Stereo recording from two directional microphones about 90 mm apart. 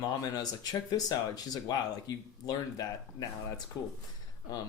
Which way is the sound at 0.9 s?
45° left (ahead or behind).